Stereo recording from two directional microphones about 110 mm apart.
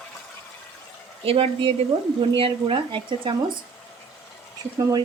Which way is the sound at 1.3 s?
60° right (ahead or behind).